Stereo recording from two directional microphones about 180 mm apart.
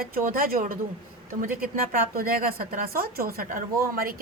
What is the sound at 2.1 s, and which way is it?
A woman's voice, 55° right (ahead or behind).